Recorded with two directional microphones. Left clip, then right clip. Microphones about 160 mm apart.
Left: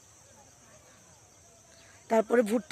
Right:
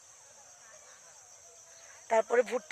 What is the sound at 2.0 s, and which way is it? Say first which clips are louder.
Speech: left 2 dB; 20° left (ahead or behind).